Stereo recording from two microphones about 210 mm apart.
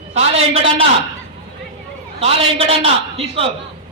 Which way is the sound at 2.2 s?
30° right (ahead or behind).